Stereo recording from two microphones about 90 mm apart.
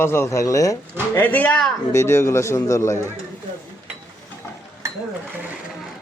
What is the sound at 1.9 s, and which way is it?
A man's voice, 30° left (ahead or behind).